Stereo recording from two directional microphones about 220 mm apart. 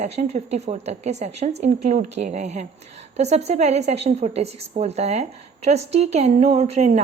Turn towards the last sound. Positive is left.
turn(degrees=-30)  # may be behind; listen again after turning